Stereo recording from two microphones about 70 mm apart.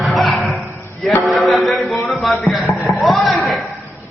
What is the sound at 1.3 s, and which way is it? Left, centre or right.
Music, centre.